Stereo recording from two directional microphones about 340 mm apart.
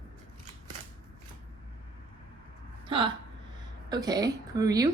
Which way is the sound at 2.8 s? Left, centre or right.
Centre.